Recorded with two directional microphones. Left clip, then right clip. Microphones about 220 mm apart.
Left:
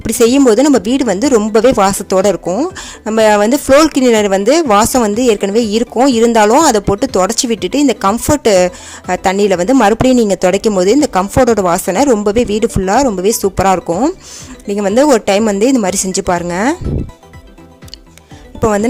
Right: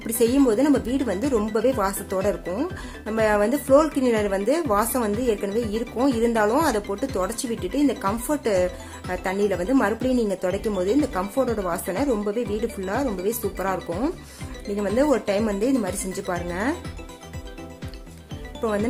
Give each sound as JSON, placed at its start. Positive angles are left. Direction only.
{"t": 0.0, "sound": "speech", "side_deg": 40}